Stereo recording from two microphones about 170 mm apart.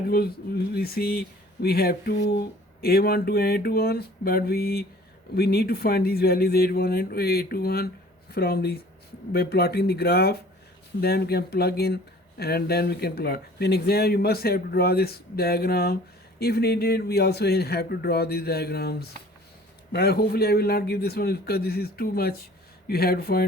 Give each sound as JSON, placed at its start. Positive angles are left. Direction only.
{"t": 0.1, "sound": "speech", "side_deg": 65}